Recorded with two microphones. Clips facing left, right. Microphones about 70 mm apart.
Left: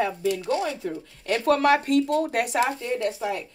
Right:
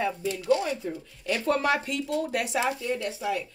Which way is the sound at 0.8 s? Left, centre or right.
Left.